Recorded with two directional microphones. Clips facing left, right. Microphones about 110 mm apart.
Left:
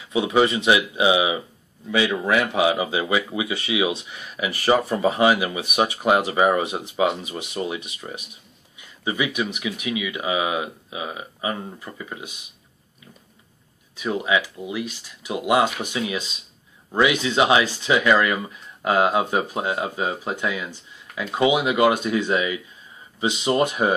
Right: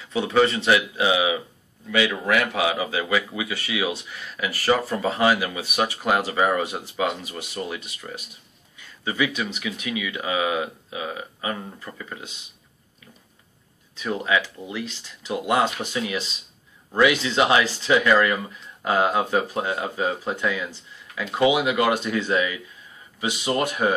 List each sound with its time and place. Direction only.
0.0 s speech: 15° left (ahead or behind)
13.9 s speech: 15° left (ahead or behind)